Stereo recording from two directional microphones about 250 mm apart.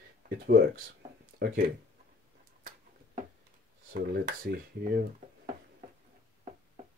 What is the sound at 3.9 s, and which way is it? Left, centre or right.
Speech, right.